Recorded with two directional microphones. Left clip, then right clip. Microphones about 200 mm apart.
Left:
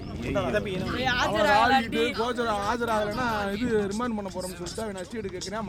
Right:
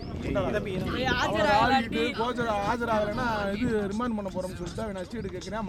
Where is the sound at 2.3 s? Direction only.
20° left (ahead or behind).